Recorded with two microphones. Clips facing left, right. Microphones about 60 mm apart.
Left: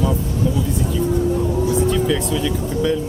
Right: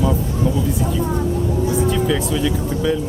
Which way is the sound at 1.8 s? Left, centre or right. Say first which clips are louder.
Even; centre.